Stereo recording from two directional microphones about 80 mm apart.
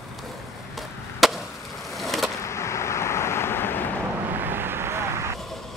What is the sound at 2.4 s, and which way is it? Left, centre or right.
Vehicle, left.